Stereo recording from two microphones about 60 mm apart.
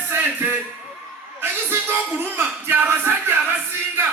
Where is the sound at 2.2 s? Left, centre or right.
Right.